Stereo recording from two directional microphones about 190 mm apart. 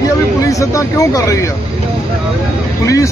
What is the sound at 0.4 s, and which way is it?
Speech, 15° left (ahead or behind).